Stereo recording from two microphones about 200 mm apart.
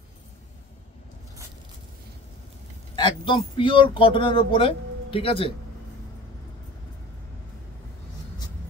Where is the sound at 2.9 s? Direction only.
25° left (ahead or behind).